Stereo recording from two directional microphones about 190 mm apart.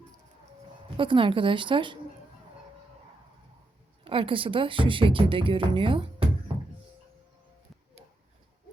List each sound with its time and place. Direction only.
0.9 s speech: 25° right (ahead or behind)
4.0 s speech: 25° right (ahead or behind)